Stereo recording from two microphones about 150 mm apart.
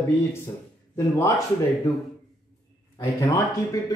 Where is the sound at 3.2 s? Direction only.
25° left (ahead or behind).